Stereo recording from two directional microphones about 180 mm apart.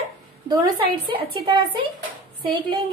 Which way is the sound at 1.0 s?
30° right (ahead or behind).